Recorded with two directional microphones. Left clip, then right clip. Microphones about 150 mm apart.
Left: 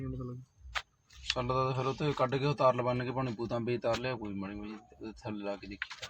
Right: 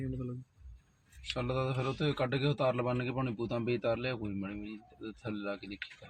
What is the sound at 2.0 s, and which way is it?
Speech, 30° right (ahead or behind).